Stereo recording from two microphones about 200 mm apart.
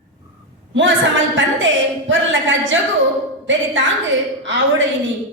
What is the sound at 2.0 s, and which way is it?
Speech, 65° right (ahead or behind).